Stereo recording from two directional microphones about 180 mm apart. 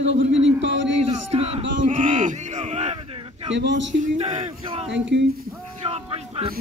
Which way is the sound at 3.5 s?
85° right.